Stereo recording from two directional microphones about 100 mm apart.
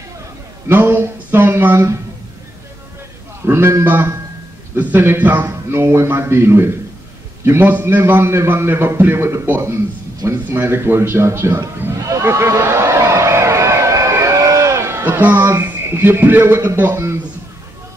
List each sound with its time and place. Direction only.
0.7 s speech: 20° right (ahead or behind)
3.4 s a man's voice: 25° right (ahead or behind)
12.0 s a sound: 30° right (ahead or behind)